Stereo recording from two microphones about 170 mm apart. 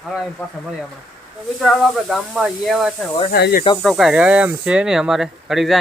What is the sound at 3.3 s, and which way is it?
Speech, 70° left (ahead or behind).